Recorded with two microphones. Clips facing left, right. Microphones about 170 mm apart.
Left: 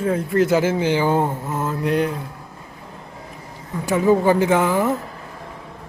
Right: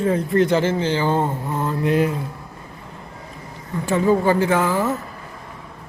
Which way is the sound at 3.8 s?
10° left (ahead or behind).